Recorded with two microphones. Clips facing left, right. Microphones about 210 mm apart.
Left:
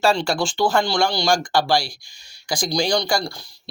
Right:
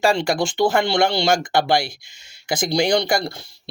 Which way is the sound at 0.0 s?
15° right (ahead or behind).